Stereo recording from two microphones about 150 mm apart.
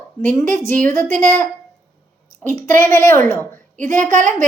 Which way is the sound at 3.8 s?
60° right (ahead or behind).